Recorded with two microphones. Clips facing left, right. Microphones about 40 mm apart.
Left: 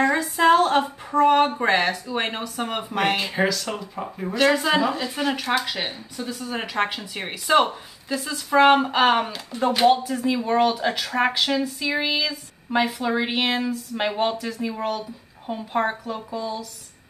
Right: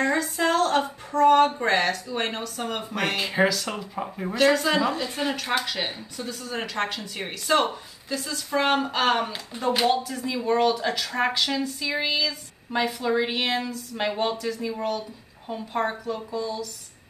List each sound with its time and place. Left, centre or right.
0.0 s speech: centre
3.2 s speech: centre
4.4 s speech: centre
9.5 s speech: right
9.8 s speech: centre